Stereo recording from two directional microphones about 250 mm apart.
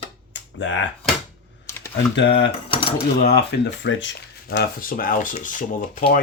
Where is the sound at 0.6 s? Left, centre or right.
Left.